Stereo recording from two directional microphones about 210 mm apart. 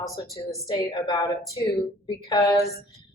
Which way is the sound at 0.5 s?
20° left (ahead or behind).